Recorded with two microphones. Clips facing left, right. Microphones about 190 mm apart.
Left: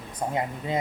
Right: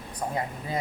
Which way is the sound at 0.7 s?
20° left (ahead or behind).